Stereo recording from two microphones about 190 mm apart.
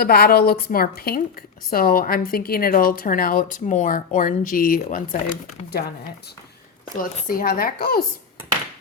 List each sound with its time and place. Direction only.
0.0 s a woman's voice: 55° left (ahead or behind); by 5.6 s 35° left (ahead or behind)
7.0 s a woman's voice: 50° left (ahead or behind)